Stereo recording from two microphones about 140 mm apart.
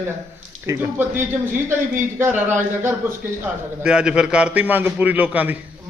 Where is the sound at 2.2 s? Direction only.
15° right (ahead or behind).